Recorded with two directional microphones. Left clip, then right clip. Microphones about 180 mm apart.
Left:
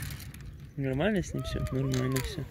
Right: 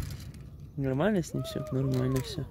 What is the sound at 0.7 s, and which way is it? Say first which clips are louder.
Speech: right 1 dB; 5° right (ahead or behind).